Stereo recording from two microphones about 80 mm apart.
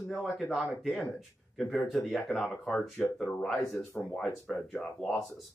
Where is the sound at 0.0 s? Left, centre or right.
Centre.